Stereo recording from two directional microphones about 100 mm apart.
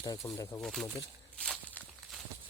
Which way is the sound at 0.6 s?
Centre (ahead or behind).